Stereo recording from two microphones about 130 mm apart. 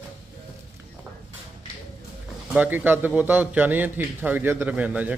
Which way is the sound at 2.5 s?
15° right (ahead or behind).